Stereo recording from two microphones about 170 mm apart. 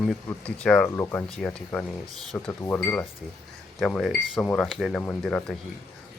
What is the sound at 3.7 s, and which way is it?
Speech, centre (ahead or behind).